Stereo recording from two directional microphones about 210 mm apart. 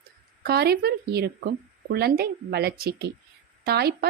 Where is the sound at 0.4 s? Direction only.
50° right (ahead or behind).